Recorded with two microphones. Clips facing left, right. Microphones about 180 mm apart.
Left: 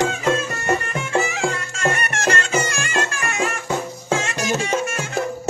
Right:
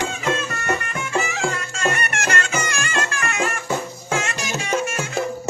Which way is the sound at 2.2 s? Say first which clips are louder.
Left 5 dB; 30° left (ahead or behind).